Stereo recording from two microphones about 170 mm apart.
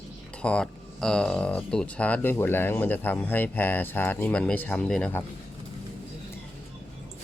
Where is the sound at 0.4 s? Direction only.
5° left (ahead or behind).